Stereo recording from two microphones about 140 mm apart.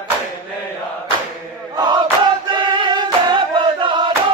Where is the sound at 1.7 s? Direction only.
30° right (ahead or behind).